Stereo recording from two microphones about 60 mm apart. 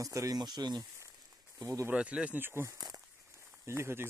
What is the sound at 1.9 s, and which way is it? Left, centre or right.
Speech, centre.